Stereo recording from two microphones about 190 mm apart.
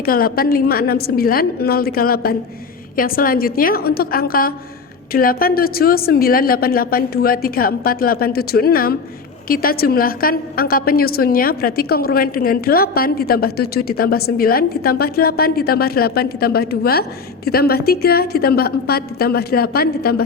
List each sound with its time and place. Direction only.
0.0 s a woman's voice: 50° left (ahead or behind)